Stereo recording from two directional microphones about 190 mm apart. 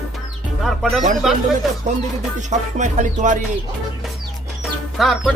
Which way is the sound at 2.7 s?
40° right (ahead or behind).